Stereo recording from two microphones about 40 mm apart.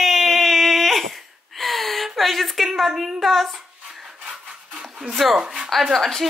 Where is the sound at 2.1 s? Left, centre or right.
Centre.